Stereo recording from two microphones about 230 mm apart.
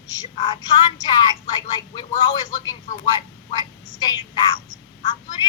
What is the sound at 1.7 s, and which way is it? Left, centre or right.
Speech, centre.